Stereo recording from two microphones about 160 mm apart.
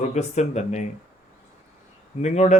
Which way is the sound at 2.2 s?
45° left (ahead or behind).